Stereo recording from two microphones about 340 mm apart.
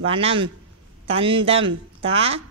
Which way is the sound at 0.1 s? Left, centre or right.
Centre.